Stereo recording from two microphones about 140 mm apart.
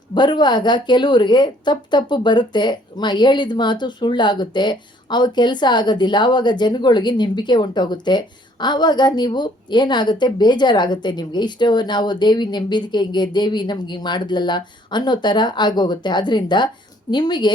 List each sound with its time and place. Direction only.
0.1 s a woman's voice: 30° left (ahead or behind)